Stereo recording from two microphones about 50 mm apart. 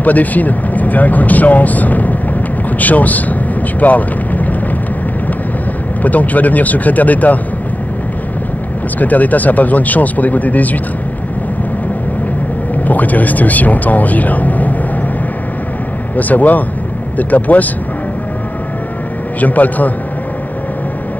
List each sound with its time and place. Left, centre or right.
0.0 s speech: left
3.8 s vehicle: left
6.0 s speech: left
9.0 s speech: left
12.8 s speech: left
16.2 s speech: left
19.4 s speech: left